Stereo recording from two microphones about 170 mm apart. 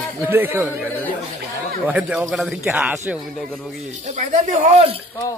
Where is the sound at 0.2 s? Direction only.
10° right (ahead or behind).